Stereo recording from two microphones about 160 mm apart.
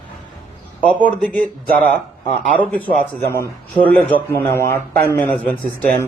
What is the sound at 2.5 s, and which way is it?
Speech, 10° left (ahead or behind).